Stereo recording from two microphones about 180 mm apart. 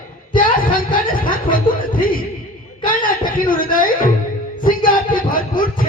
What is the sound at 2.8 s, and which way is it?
Music, 50° left (ahead or behind).